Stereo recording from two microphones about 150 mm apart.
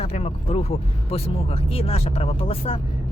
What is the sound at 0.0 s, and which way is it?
Speech, 45° left (ahead or behind).